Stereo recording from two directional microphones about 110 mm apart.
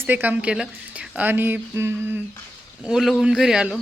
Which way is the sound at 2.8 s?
5° right (ahead or behind).